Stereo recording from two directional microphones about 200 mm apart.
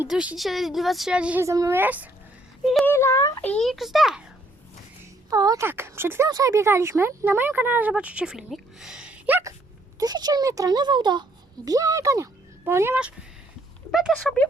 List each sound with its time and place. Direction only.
0.0 s speech: 5° right (ahead or behind)
2.7 s speech: 10° left (ahead or behind)
5.3 s speech: 15° right (ahead or behind); by 14.4 s centre (ahead or behind)